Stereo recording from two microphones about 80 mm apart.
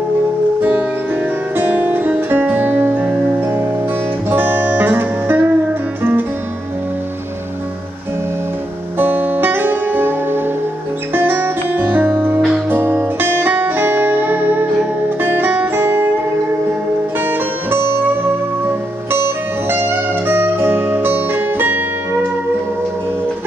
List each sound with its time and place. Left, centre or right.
1.6 s music: right
4.3 s music: right
8.9 s music: right
17.3 s music: right
19.2 s music: right